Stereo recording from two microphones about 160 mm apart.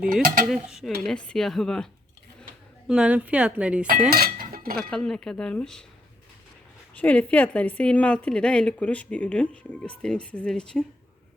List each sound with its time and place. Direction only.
0.0 s dishes: 60° right (ahead or behind)
0.4 s speech: centre (ahead or behind)
4.1 s cutlery: 70° right (ahead or behind)
4.8 s speech: 5° left (ahead or behind)
6.9 s a woman's voice: 10° left (ahead or behind)